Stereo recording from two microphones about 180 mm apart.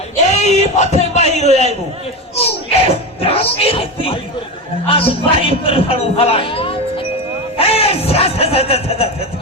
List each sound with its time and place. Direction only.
0.3 s a sound: 40° left (ahead or behind)
1.4 s a man's voice: 40° left (ahead or behind)
2.3 s music: 35° left (ahead or behind)
4.9 s speech: 30° left (ahead or behind)